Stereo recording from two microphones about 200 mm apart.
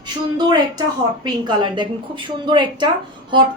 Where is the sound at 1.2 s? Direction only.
20° right (ahead or behind).